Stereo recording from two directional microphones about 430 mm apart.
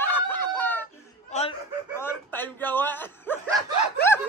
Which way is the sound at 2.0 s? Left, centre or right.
Centre.